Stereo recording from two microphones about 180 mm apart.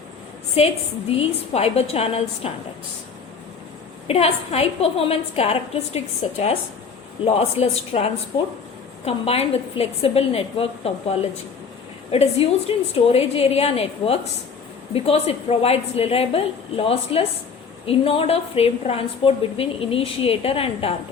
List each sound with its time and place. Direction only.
0.6 s a woman's voice: 35° left (ahead or behind)
4.0 s a woman's voice: 35° left (ahead or behind)